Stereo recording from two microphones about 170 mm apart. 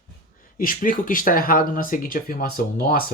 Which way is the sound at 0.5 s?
55° left (ahead or behind).